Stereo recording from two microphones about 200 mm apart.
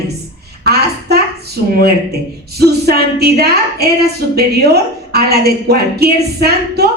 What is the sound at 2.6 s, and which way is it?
A woman's voice, 50° right (ahead or behind).